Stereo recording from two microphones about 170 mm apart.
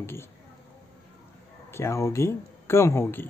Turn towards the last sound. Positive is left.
turn(degrees=15)  # may be behind; listen again after turning